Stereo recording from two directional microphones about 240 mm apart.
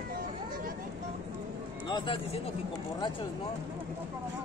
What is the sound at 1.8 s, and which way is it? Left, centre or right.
Speech, centre.